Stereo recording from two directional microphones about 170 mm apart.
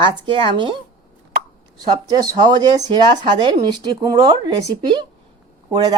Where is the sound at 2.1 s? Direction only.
25° right (ahead or behind).